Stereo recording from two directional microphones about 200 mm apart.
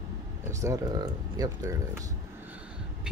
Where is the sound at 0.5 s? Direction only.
15° right (ahead or behind).